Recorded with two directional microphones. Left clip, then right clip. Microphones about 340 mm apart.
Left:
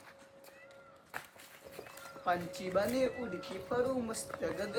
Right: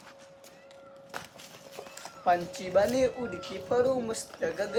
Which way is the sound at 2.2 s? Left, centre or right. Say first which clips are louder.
Right 8 dB; right.